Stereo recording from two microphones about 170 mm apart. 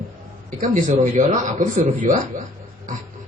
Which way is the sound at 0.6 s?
45° right (ahead or behind).